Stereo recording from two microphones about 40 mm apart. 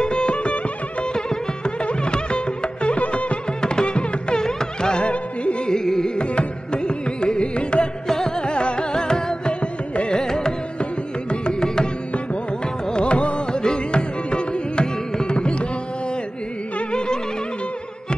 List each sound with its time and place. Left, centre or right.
0.0 s music: left
4.4 s music: centre
5.0 s music: left
5.7 s carnatic music: centre
8.1 s music: centre
8.5 s carnatic music: left
12.8 s music: left
16.9 s music: left